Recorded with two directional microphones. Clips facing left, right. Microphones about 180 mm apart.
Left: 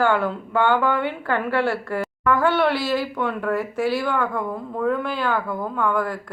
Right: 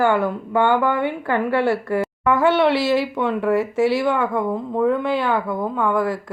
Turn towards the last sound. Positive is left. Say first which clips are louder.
# right 3 dB
turn(degrees=-25)  # may be behind; listen again after turning